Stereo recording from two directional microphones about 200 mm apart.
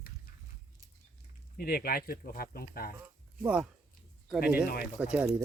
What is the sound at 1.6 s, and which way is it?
Speech, 50° left (ahead or behind).